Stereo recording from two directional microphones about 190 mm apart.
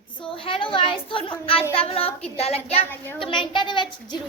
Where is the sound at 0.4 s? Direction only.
30° left (ahead or behind).